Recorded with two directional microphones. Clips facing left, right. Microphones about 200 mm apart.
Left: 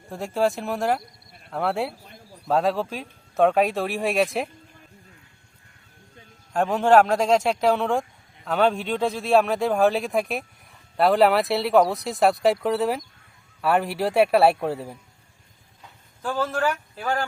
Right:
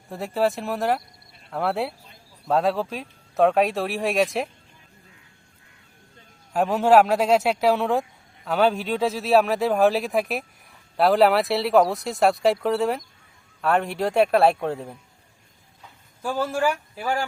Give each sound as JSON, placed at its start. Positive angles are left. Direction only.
{"t": 0.1, "sound": "speech", "side_deg": 0}
{"t": 6.5, "sound": "speech", "side_deg": -5}
{"t": 16.2, "sound": "speech", "side_deg": -10}